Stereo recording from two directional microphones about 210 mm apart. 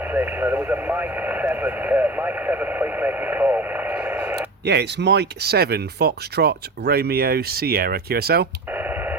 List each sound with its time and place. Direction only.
0.1 s speech: 10° right (ahead or behind)
4.6 s speech: 55° right (ahead or behind)
8.7 s radio: 10° right (ahead or behind)